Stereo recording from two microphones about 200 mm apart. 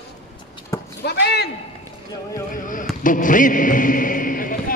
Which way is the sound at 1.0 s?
55° left (ahead or behind).